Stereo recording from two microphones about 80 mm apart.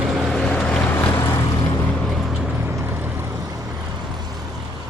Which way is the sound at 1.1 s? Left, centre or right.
Left.